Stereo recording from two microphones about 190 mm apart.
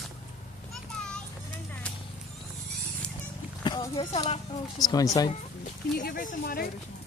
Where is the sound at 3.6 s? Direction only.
25° left (ahead or behind).